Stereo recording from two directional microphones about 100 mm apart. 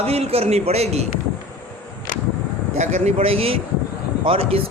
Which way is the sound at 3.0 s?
75° right (ahead or behind).